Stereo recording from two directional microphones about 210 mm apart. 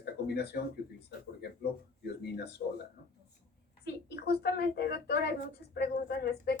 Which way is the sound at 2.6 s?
45° left (ahead or behind).